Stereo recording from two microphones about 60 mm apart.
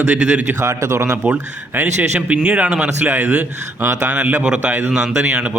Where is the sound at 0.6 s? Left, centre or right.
Right.